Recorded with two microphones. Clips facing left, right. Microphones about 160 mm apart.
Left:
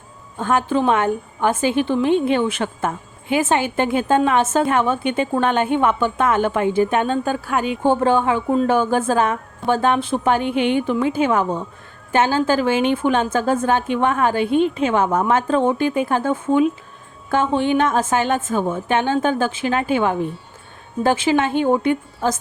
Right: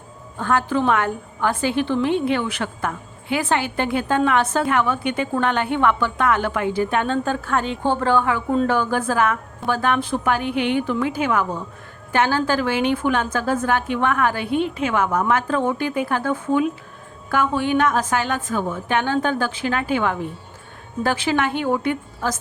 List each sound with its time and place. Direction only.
0.3 s a woman's voice: 20° left (ahead or behind)